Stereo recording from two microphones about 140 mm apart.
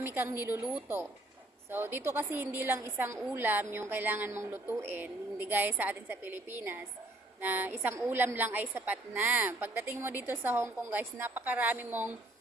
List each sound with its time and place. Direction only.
0.0 s a woman's voice: 15° right (ahead or behind)